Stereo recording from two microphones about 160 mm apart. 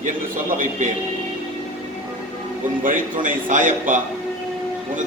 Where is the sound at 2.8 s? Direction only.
55° right (ahead or behind).